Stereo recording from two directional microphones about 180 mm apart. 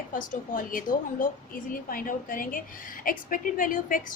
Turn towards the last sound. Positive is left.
turn(degrees=50)  # may be behind; listen again after turning